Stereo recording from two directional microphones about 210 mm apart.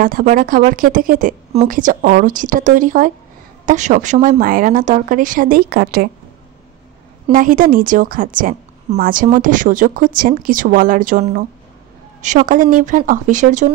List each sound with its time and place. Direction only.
0.0 s a woman's voice: 40° right (ahead or behind)
7.3 s a woman's voice: 40° right (ahead or behind)